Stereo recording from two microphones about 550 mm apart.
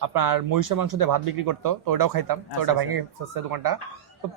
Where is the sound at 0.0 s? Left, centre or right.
Right.